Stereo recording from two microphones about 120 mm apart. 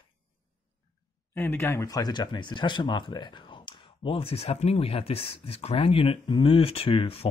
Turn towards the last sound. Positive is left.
turn(degrees=50)  # may be behind; listen again after turning